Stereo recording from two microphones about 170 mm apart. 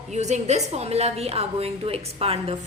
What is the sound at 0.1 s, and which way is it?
A woman's voice, 45° right (ahead or behind).